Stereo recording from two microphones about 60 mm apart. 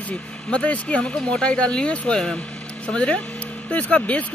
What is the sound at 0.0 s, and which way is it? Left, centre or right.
Speech, centre.